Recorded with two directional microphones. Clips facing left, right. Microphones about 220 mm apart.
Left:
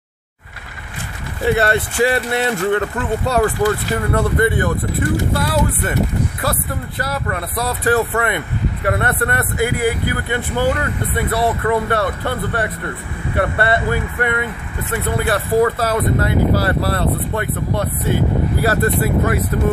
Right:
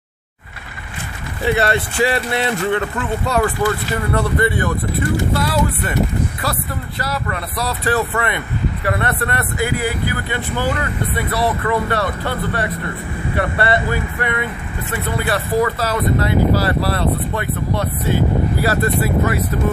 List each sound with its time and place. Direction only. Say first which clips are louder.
1.4 s speech: left 1 dB; 50° left (ahead or behind)
3.9 s speech: left 1 dB; 50° left (ahead or behind)
7.0 s speech: left 1 dB; 50° left (ahead or behind)